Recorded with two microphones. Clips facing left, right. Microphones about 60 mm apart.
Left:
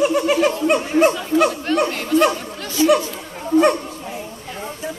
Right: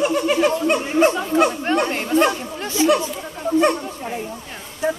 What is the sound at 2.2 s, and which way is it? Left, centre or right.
Chatter, right.